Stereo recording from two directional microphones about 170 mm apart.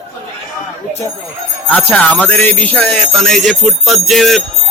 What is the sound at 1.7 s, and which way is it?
Speech, 10° left (ahead or behind).